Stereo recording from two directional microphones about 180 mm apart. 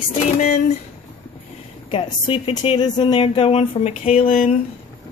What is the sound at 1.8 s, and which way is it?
Speech, 30° left (ahead or behind).